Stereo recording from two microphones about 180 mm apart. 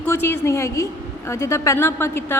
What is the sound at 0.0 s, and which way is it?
A woman's voice, 10° left (ahead or behind).